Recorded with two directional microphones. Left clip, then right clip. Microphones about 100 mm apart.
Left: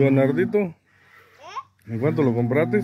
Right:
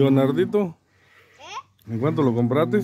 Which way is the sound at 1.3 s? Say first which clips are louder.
Left 1 dB; 5° right (ahead or behind).